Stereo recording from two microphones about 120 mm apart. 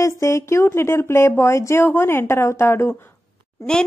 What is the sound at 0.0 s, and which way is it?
Speech, 25° left (ahead or behind).